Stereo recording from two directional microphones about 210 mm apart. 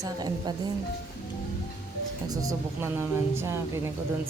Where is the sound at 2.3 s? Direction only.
15° right (ahead or behind).